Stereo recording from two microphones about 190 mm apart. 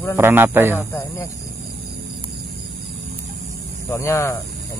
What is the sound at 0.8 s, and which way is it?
Speech, 15° left (ahead or behind).